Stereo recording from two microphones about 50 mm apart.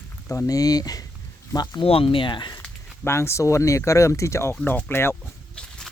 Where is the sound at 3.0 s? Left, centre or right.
Left.